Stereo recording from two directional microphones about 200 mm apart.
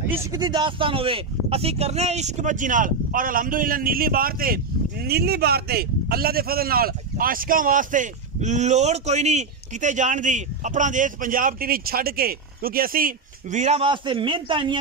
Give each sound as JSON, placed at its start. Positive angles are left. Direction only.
{"t": 0.1, "sound": "a man's voice", "side_deg": -15}